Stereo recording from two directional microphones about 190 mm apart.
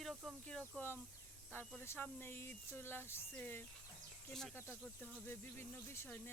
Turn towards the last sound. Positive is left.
turn(degrees=10)  # may be behind; listen again after turning